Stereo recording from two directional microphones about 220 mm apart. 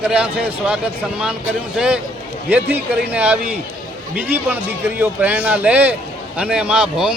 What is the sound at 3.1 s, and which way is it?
A man's voice, 5° right (ahead or behind).